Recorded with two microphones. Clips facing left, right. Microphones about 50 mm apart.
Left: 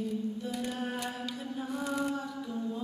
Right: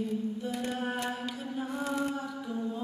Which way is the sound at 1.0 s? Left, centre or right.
Centre.